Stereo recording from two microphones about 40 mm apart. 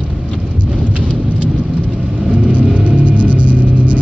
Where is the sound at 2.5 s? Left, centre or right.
Right.